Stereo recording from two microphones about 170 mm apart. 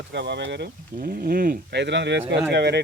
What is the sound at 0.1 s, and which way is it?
Speech, 90° right.